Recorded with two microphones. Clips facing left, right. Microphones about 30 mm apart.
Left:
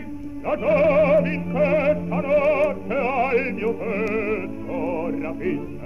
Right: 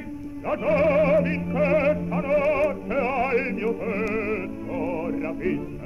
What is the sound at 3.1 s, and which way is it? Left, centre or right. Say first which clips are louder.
Music: left 4 dB; left.